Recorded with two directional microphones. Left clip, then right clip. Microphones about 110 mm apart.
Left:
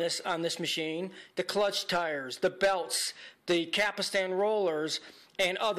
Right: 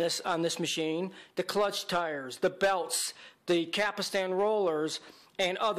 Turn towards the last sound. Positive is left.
turn(degrees=-30)  # may be behind; listen again after turning